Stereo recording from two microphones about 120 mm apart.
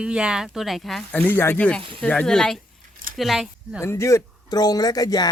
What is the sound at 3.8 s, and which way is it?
Speech, 20° left (ahead or behind).